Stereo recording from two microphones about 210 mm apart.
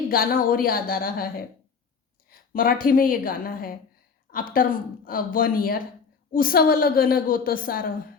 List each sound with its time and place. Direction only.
0.1 s a woman's voice: 45° left (ahead or behind)